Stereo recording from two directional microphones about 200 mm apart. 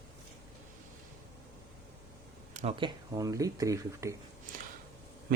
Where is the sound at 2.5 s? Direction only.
35° right (ahead or behind); by 4.1 s 15° right (ahead or behind).